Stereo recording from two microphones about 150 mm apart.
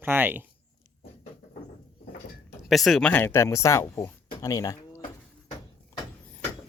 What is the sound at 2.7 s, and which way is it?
Speech, centre (ahead or behind).